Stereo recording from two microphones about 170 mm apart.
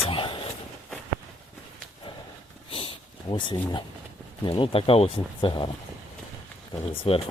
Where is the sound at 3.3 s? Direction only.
25° left (ahead or behind).